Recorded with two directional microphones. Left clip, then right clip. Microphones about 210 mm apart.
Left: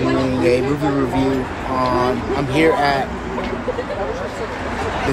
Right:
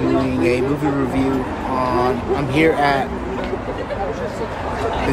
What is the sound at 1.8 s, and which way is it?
Speech, 5° right (ahead or behind).